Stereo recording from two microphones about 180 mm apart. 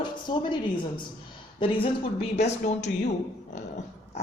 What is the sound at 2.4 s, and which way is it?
Speech, 40° left (ahead or behind).